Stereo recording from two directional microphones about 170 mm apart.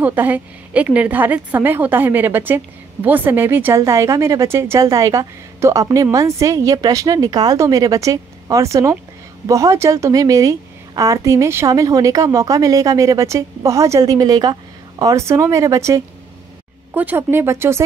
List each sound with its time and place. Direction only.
0.0 s a woman's voice: 10° right (ahead or behind)